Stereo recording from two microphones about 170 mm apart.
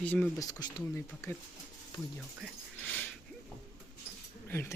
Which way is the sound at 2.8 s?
10° left (ahead or behind).